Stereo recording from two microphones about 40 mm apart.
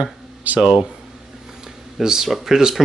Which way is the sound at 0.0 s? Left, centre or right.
Right.